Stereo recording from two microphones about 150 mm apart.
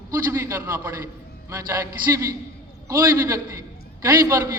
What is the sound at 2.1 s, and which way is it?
A man's voice, 20° right (ahead or behind).